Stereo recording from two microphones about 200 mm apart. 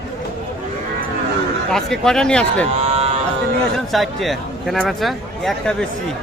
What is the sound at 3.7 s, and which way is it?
Speech, centre (ahead or behind).